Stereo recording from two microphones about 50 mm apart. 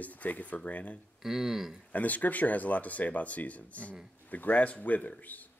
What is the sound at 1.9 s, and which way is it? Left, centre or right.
Speech, left.